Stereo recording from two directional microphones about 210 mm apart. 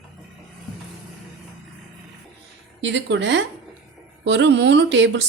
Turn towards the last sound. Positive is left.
turn(degrees=-60)  # may be behind; listen again after turning